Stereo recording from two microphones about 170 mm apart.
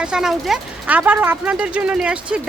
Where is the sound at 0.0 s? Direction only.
5° right (ahead or behind).